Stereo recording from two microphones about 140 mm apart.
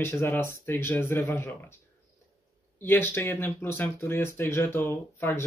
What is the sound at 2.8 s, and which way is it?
Speech, 15° left (ahead or behind).